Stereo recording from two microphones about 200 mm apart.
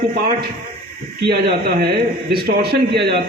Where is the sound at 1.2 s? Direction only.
50° right (ahead or behind).